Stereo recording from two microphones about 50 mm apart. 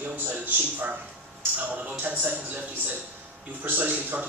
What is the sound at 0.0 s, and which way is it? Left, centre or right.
A man's voice, right.